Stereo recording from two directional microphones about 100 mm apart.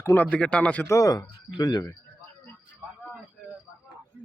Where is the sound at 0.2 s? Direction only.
10° left (ahead or behind).